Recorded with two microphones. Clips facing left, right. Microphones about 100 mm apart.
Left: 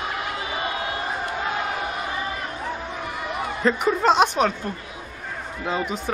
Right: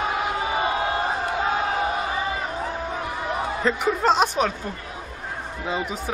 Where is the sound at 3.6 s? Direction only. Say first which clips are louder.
Left 2 dB; centre (ahead or behind).